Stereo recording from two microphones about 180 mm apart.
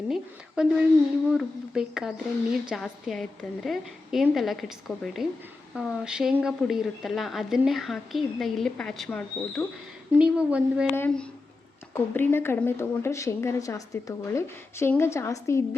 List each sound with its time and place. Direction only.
0.1 s a woman's voice: 5° right (ahead or behind)
10.1 s a woman's voice: 5° right (ahead or behind)
10.9 s speech: 10° left (ahead or behind)